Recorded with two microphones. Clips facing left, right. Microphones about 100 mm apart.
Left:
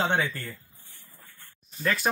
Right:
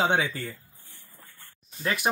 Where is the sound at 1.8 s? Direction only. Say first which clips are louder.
Even; 15° right (ahead or behind).